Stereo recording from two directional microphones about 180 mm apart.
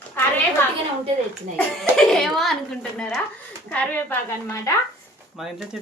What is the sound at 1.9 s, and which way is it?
A child's voice, centre (ahead or behind).